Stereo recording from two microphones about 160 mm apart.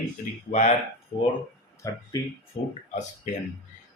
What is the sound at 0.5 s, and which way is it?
Speech, 45° left (ahead or behind).